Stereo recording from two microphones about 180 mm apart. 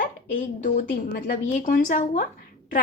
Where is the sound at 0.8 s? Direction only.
60° left (ahead or behind).